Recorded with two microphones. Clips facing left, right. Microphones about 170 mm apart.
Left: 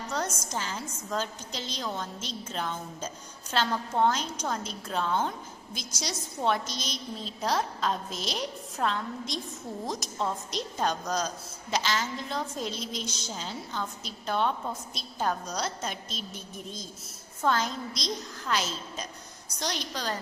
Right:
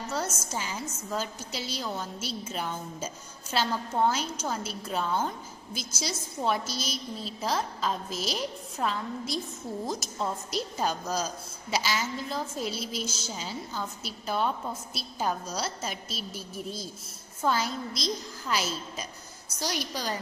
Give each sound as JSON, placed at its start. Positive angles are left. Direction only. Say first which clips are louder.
{"t": 0.4, "sound": "a woman's voice", "louder": "even", "side_deg": -10}